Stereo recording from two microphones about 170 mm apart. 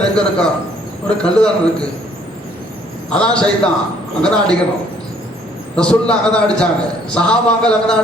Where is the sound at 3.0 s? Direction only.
5° left (ahead or behind).